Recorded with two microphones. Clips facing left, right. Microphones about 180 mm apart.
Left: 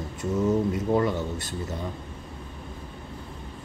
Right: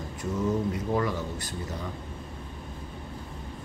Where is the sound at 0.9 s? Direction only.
25° left (ahead or behind).